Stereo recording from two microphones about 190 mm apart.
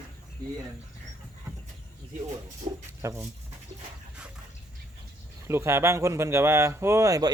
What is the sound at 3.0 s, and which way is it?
Speech, 15° right (ahead or behind).